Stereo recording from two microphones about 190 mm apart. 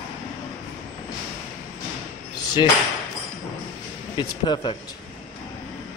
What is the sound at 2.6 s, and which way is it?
Speech, 25° left (ahead or behind).